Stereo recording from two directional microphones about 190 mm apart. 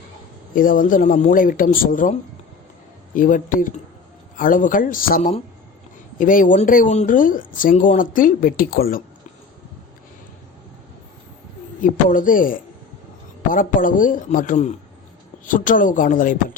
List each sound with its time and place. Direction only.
0.5 s speech: 45° left (ahead or behind)
3.2 s speech: 45° left (ahead or behind)
11.8 s speech: 45° left (ahead or behind)